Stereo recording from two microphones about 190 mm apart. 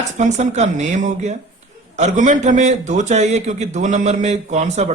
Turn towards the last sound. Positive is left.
turn(degrees=-35)  # may be behind; listen again after turning